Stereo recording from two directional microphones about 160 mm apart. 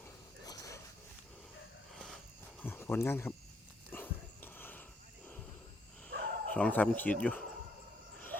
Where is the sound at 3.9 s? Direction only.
10° left (ahead or behind).